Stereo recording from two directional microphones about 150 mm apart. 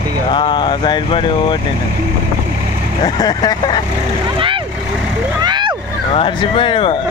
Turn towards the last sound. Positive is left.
turn(degrees=35)  # may be behind; listen again after turning